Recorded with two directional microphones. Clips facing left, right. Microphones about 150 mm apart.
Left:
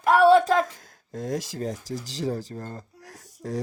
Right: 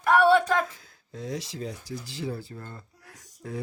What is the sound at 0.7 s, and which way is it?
Speech, 45° left (ahead or behind).